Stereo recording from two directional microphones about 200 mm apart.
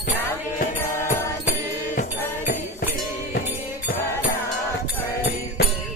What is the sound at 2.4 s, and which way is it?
Music, 45° left (ahead or behind).